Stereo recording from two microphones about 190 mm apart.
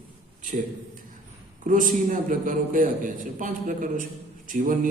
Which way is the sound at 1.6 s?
45° right (ahead or behind).